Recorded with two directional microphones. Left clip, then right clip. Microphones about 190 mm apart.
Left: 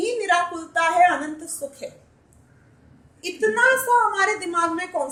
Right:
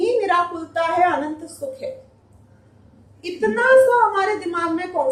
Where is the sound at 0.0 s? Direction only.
55° left (ahead or behind).